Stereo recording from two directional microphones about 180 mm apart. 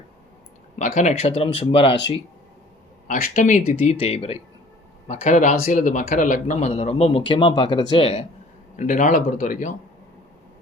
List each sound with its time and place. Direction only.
0.8 s speech: 45° left (ahead or behind)
3.1 s speech: 45° left (ahead or behind); by 8.2 s 30° left (ahead or behind)
8.7 s speech: 45° left (ahead or behind)